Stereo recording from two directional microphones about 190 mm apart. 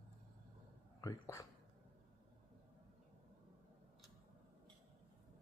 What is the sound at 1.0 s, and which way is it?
Speech, 15° left (ahead or behind).